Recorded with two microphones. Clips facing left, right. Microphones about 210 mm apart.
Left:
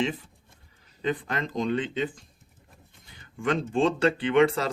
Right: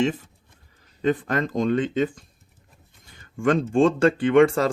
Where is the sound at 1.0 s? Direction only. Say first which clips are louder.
Right 6 dB; 45° right (ahead or behind).